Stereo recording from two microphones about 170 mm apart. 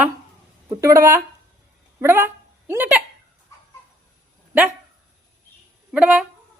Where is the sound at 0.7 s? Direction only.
15° right (ahead or behind).